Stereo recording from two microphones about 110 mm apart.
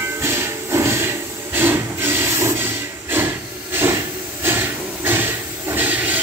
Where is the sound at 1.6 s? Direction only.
20° right (ahead or behind).